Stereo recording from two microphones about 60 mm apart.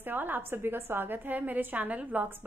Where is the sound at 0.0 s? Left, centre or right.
Right.